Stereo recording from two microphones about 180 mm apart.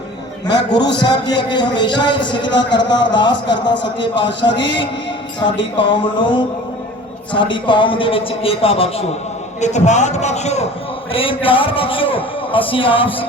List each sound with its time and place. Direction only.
0.4 s speech: 70° left (ahead or behind)
1.0 s a man's voice: 25° left (ahead or behind)